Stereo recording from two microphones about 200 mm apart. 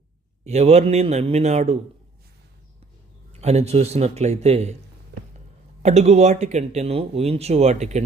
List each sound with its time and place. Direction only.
0.4 s speech: 35° right (ahead or behind)
3.4 s speech: 30° right (ahead or behind)
5.8 s speech: 35° right (ahead or behind)